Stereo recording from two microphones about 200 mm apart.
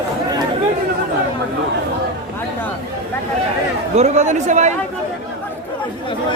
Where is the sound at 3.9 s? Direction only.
35° right (ahead or behind).